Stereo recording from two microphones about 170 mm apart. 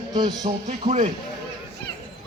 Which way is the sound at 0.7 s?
45° right (ahead or behind).